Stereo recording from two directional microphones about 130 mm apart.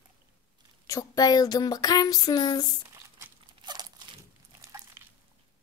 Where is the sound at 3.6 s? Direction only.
35° right (ahead or behind).